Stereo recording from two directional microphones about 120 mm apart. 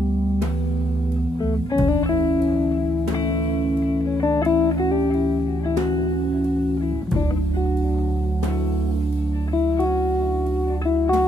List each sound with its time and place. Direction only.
1.7 s music: 30° left (ahead or behind)
4.2 s music: 30° left (ahead or behind)
9.7 s music: 30° left (ahead or behind)